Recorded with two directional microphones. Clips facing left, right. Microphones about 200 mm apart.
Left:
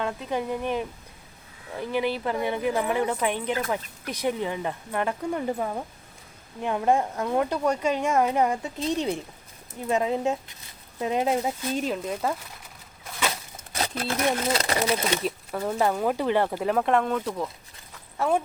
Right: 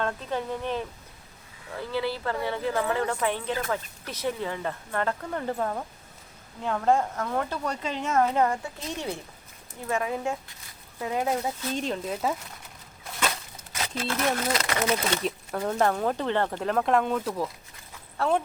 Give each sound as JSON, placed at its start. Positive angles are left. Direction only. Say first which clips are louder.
{"t": 0.0, "sound": "speech", "louder": "left 1 dB", "side_deg": 15}
{"t": 11.7, "sound": "speech", "louder": "left 1 dB", "side_deg": 5}
{"t": 13.7, "sound": "a sound", "louder": "left 2 dB", "side_deg": 35}
{"t": 14.2, "sound": "speech", "louder": "left 2 dB", "side_deg": 15}
{"t": 14.5, "sound": "speech", "louder": "left 2 dB", "side_deg": 30}
{"t": 15.1, "sound": "speech", "louder": "left 1 dB", "side_deg": 5}
{"t": 18.2, "sound": "speech", "louder": "left 1 dB", "side_deg": 10}